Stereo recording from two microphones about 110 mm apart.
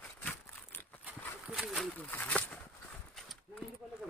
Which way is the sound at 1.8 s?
15° left (ahead or behind).